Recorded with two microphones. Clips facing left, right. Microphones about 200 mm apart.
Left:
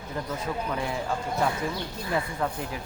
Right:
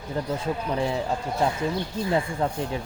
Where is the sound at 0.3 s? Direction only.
30° right (ahead or behind).